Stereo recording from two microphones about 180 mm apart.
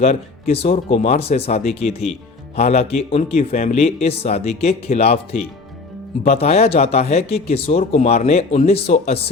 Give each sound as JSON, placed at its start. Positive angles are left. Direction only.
{"t": 0.0, "sound": "speech", "side_deg": 35}
{"t": 6.2, "sound": "speech", "side_deg": 35}